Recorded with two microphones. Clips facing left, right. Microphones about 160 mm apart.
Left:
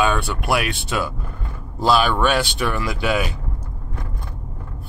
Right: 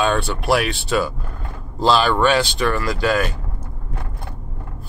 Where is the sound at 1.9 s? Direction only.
Centre (ahead or behind).